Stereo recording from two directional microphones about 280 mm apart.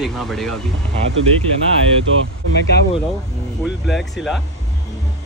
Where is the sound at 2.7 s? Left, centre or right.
Left.